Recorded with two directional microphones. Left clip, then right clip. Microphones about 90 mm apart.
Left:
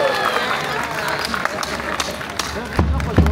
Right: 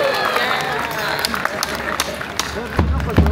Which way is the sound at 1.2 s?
35° right (ahead or behind).